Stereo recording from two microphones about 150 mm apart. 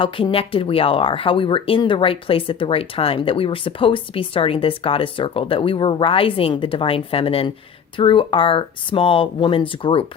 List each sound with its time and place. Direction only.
0.0 s speech: 40° left (ahead or behind)